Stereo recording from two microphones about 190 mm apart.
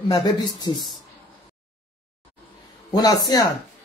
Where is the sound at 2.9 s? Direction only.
20° left (ahead or behind).